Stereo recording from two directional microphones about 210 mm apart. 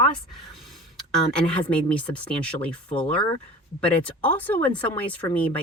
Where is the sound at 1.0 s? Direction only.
5° left (ahead or behind).